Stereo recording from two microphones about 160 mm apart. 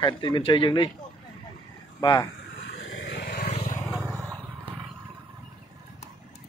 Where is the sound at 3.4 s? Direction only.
45° left (ahead or behind).